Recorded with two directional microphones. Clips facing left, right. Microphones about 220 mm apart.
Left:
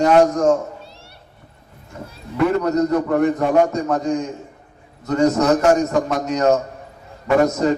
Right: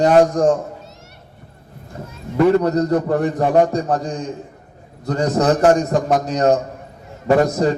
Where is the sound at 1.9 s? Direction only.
35° right (ahead or behind).